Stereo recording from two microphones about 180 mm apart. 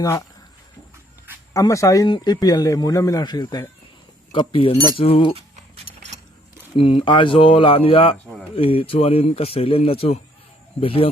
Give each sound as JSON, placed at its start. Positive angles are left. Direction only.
{"t": 0.0, "sound": "a man's voice", "side_deg": 20}
{"t": 1.5, "sound": "a man's voice", "side_deg": 15}
{"t": 5.3, "sound": "a sound", "side_deg": -35}
{"t": 6.7, "sound": "speech", "side_deg": 30}